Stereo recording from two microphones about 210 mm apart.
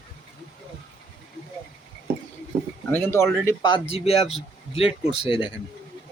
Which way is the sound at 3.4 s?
20° left (ahead or behind).